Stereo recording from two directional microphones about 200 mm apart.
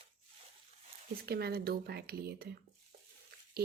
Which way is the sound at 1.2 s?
50° right (ahead or behind).